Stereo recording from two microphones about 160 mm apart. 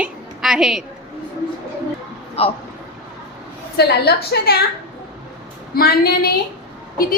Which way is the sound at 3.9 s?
85° left.